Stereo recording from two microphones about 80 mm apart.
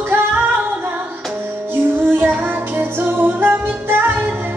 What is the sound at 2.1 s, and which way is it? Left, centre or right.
Music, right.